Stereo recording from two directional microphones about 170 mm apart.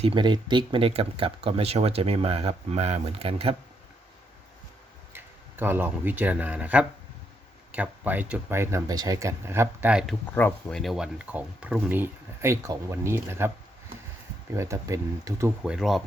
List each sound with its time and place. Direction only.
0.0 s speech: 30° right (ahead or behind)
5.1 s speech: 10° right (ahead or behind)
10.3 s speech: 5° left (ahead or behind); by 13.5 s 15° right (ahead or behind)
14.5 s speech: 15° right (ahead or behind)
15.6 s speech: 5° right (ahead or behind)